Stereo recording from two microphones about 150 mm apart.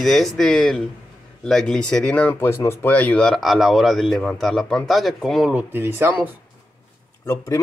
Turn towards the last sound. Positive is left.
turn(degrees=20)  # may be behind; listen again after turning